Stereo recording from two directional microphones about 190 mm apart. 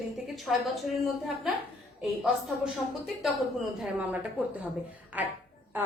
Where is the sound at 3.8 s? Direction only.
5° right (ahead or behind).